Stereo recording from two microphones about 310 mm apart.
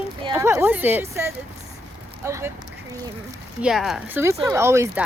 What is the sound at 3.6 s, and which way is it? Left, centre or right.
Speech, centre.